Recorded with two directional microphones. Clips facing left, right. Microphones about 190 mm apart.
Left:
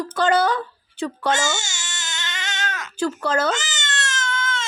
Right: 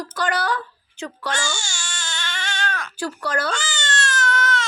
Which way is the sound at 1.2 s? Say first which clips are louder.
Left 5 dB; 20° left (ahead or behind).